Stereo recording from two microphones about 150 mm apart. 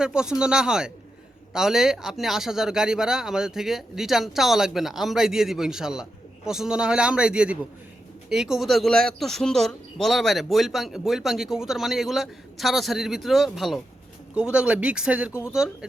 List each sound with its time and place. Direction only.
0.0 s speech: 5° right (ahead or behind)
15.3 s speech: 15° left (ahead or behind)
15.5 s speech: 5° right (ahead or behind)